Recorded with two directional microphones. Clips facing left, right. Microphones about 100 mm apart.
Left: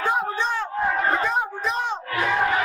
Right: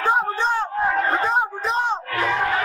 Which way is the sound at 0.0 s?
30° right (ahead or behind).